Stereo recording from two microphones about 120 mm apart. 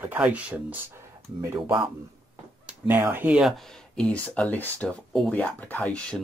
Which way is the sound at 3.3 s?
Centre (ahead or behind).